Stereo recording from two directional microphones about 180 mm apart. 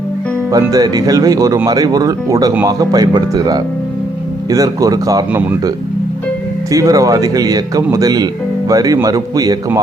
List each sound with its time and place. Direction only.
0.5 s speech: 20° right (ahead or behind)
6.7 s speech: 20° right (ahead or behind)